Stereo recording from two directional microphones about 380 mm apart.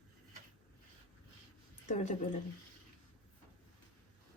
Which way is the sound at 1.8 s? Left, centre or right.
Centre.